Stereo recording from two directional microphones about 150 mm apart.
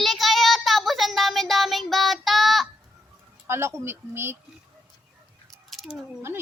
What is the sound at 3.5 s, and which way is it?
Speech, 15° right (ahead or behind).